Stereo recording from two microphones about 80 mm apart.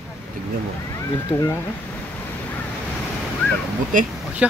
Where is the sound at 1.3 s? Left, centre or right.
Left.